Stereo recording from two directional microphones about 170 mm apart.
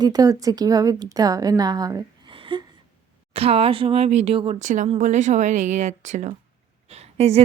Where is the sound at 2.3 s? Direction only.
30° right (ahead or behind).